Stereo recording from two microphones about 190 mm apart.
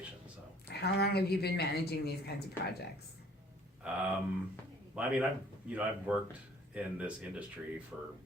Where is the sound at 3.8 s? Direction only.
5° right (ahead or behind).